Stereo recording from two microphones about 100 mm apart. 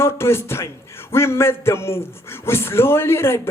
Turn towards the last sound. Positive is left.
turn(degrees=25)  # may be behind; listen again after turning